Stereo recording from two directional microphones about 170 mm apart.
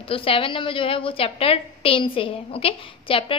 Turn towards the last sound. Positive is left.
turn(degrees=30)  # may be behind; listen again after turning